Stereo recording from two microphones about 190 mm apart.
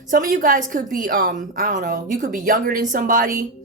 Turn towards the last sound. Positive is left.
turn(degrees=-45)  # may be behind; listen again after turning